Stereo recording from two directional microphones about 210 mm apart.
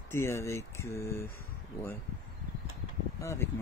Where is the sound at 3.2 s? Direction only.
10° left (ahead or behind).